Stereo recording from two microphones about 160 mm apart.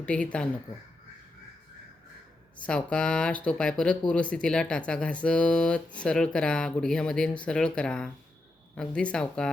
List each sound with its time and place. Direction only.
0.0 s speech: 5° left (ahead or behind)
2.6 s speech: 5° left (ahead or behind)